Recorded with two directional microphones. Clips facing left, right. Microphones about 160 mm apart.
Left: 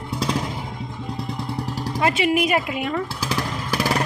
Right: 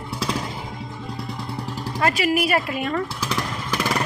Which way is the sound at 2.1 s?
20° left (ahead or behind).